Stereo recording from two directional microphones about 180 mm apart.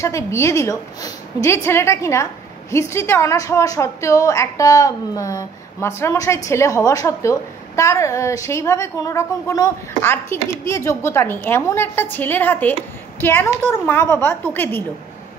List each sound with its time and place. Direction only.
0.0 s a woman's voice: 15° left (ahead or behind)